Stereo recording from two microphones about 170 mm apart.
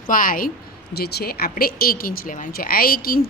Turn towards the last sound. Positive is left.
turn(degrees=60)  # may be behind; listen again after turning